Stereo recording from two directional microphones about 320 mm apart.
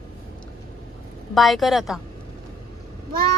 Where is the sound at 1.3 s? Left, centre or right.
Centre.